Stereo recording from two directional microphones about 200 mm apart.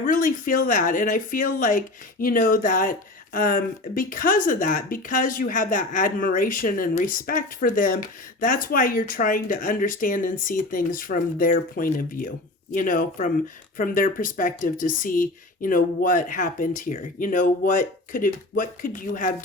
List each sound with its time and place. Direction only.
0.0 s speech: 40° left (ahead or behind)